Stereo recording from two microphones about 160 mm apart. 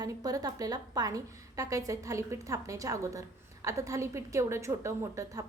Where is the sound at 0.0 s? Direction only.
25° right (ahead or behind).